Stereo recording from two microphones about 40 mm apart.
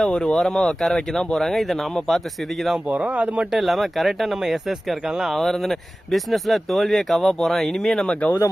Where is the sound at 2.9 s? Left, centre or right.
Right.